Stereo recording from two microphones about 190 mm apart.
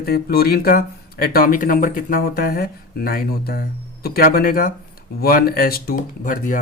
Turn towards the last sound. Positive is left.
turn(degrees=45)  # may be behind; listen again after turning